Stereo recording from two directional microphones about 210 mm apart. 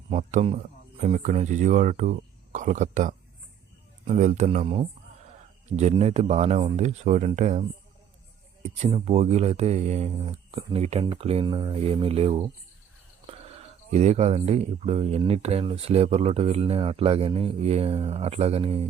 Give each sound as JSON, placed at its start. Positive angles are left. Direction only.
{"t": 0.1, "sound": "speech", "side_deg": -35}
{"t": 8.6, "sound": "speech", "side_deg": -30}